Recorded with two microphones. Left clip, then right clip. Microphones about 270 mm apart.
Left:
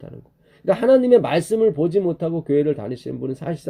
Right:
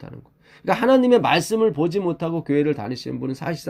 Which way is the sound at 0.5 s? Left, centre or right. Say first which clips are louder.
Left 2 dB; right.